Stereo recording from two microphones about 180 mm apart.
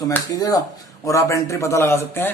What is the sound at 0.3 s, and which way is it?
A man's voice, 20° left (ahead or behind).